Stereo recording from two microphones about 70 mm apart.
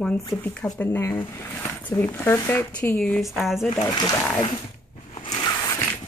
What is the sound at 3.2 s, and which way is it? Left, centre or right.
Speech, centre.